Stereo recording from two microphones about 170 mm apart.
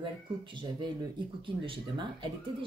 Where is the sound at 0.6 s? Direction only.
25° right (ahead or behind).